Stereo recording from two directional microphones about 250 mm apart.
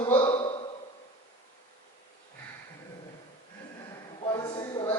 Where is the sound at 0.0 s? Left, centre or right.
Left.